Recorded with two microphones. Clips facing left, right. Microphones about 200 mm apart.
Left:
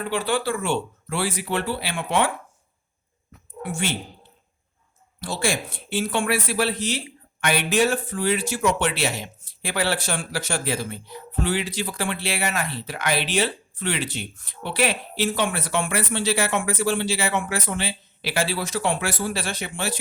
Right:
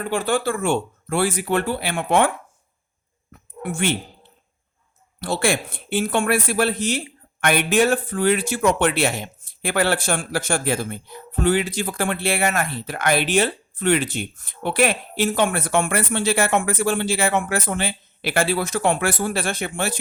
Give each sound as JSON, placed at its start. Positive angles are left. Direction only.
{"t": 0.1, "sound": "speech", "side_deg": -45}
{"t": 3.6, "sound": "speech", "side_deg": -55}
{"t": 5.2, "sound": "speech", "side_deg": -60}